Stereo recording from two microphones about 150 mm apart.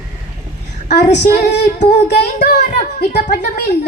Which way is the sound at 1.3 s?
90° left.